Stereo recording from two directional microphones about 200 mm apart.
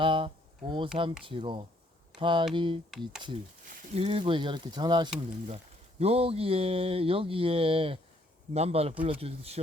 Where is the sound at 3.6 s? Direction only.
35° right (ahead or behind); by 5.1 s 20° right (ahead or behind).